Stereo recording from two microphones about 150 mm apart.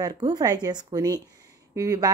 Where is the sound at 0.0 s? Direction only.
25° right (ahead or behind).